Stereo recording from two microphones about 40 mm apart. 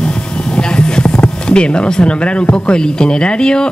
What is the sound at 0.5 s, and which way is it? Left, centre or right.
Speech, left.